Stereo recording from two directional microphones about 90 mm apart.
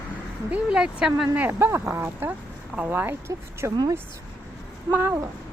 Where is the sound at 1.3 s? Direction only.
20° right (ahead or behind).